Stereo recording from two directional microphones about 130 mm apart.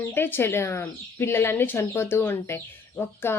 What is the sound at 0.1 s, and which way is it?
Speech, 15° left (ahead or behind).